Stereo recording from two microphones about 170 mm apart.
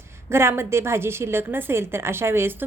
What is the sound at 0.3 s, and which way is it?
A woman's voice, 15° right (ahead or behind).